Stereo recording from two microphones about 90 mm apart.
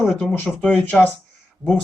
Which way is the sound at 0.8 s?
15° left (ahead or behind).